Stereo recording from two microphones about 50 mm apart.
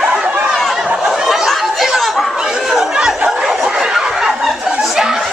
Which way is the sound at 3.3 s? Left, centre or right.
Centre.